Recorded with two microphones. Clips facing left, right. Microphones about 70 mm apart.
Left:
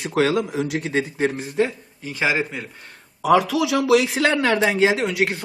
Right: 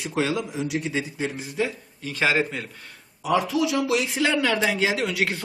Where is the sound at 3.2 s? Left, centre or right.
Left.